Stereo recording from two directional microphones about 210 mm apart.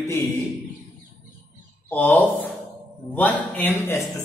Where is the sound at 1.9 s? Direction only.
10° left (ahead or behind).